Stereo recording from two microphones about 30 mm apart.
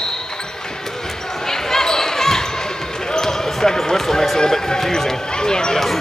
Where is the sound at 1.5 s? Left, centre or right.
Centre.